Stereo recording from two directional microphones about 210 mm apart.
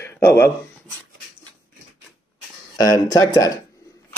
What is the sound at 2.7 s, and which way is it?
Speech, 20° left (ahead or behind).